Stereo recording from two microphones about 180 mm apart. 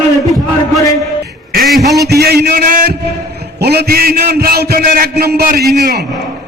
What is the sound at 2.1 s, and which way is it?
A man's voice, 60° right (ahead or behind).